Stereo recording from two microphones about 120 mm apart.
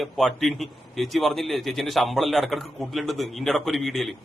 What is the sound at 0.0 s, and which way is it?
Speech, centre (ahead or behind).